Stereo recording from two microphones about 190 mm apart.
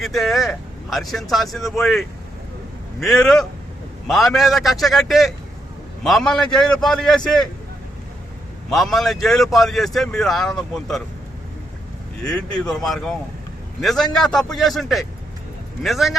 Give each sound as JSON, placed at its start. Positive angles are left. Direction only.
{"t": 0.0, "sound": "speech", "side_deg": 0}
{"t": 8.7, "sound": "speech", "side_deg": 0}
{"t": 12.2, "sound": "speech", "side_deg": 5}